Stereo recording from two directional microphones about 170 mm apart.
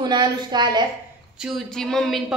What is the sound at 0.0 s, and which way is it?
Speech, 25° right (ahead or behind).